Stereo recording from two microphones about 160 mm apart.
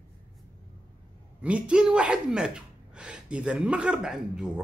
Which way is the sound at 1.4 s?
5° right (ahead or behind).